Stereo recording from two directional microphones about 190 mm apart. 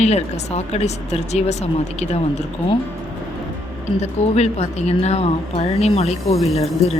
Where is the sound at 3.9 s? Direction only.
35° left (ahead or behind).